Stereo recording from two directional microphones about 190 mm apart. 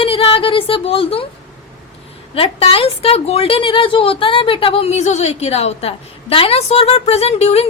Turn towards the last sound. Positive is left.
turn(degrees=35)  # may be behind; listen again after turning